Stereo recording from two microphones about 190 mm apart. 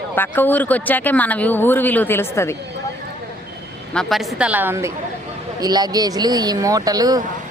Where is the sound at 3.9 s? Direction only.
Centre (ahead or behind).